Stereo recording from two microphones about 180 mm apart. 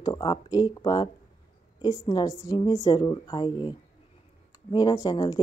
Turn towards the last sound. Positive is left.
turn(degrees=20)  # may be behind; listen again after turning